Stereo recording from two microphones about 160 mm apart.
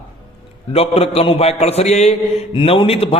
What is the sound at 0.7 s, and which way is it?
A man's voice, 40° left (ahead or behind).